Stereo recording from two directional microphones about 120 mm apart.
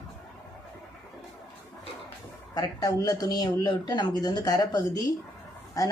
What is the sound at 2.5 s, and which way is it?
Speech, 35° left (ahead or behind).